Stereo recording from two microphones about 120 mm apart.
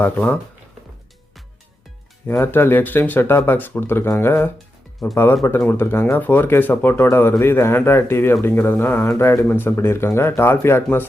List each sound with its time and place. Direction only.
0.0 s speech: 10° left (ahead or behind)
2.2 s speech: 20° left (ahead or behind)